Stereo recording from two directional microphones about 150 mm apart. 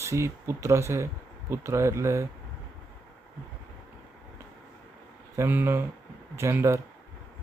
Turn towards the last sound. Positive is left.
turn(degrees=-20)  # may be behind; listen again after turning